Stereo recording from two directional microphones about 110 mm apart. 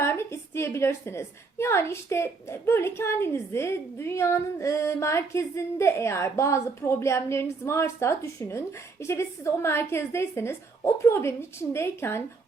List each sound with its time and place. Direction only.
0.0 s a woman's voice: 25° left (ahead or behind)